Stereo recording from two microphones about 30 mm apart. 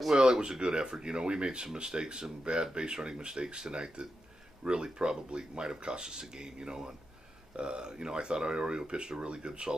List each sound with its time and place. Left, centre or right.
0.1 s speech: right